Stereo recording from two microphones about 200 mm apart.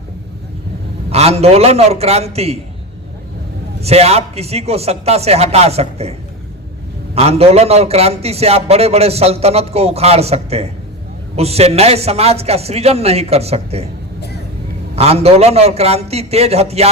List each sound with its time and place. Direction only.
1.1 s a man's voice: 30° right (ahead or behind)
3.8 s a man's voice: 30° right (ahead or behind)
7.2 s a man's voice: 30° right (ahead or behind)
14.9 s a man's voice: 30° right (ahead or behind)